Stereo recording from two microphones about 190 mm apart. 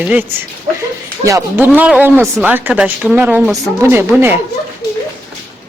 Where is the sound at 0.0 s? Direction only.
10° right (ahead or behind).